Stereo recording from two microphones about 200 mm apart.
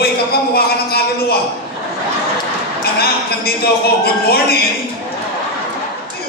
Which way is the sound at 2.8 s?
50° left (ahead or behind).